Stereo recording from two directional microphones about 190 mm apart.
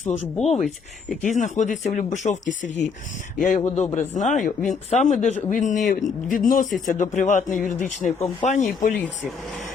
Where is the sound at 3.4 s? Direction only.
40° left (ahead or behind).